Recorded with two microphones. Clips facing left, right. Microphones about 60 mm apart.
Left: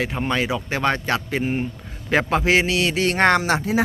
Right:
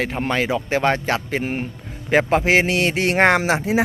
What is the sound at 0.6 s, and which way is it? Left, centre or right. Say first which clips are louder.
Speech: right 3 dB; right.